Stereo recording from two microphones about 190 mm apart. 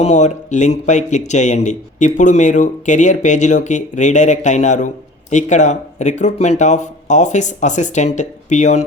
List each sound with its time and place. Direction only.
0.0 s speech: 35° left (ahead or behind)